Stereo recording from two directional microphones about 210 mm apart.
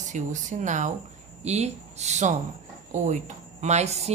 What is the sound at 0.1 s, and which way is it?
Speech, 35° right (ahead or behind).